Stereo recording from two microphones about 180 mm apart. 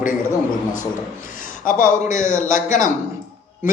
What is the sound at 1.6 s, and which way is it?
A man's voice, 45° left (ahead or behind).